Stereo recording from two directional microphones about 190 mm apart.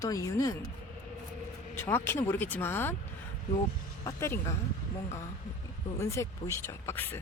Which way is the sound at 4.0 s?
15° left (ahead or behind).